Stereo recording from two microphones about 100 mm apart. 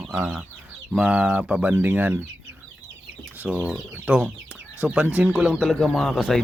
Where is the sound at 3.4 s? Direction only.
15° right (ahead or behind).